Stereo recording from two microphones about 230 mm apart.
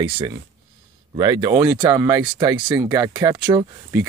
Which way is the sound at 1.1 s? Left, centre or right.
Centre.